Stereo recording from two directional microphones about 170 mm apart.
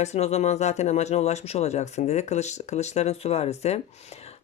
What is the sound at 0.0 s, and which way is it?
Speech, 40° left (ahead or behind).